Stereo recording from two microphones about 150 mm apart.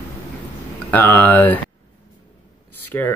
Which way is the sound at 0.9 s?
10° left (ahead or behind).